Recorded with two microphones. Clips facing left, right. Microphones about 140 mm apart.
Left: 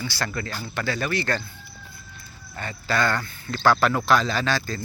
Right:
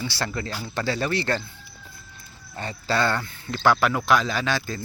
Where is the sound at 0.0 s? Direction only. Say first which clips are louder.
Right 1 dB; 20° right (ahead or behind).